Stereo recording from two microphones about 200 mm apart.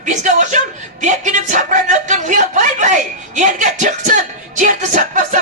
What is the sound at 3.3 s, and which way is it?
Music, 40° right (ahead or behind).